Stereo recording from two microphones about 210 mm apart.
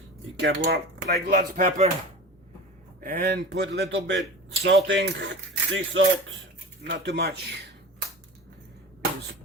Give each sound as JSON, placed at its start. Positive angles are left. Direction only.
{"t": 0.3, "sound": "speech", "side_deg": -55}
{"t": 3.0, "sound": "speech", "side_deg": -45}
{"t": 6.9, "sound": "speech", "side_deg": -50}